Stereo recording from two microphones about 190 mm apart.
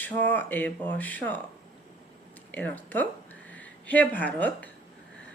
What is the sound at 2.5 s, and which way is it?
A woman's voice, 10° left (ahead or behind).